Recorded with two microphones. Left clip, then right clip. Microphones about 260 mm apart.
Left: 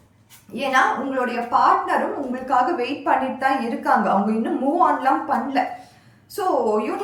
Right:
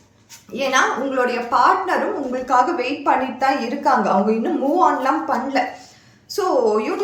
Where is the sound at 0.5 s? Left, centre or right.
Centre.